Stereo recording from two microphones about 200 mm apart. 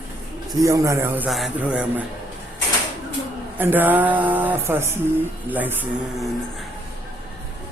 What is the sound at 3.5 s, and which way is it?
Speech, 10° right (ahead or behind).